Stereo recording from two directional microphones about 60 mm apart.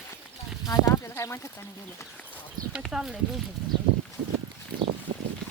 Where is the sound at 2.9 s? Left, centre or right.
Centre.